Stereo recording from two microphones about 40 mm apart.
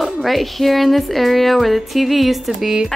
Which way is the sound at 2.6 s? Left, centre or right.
Centre.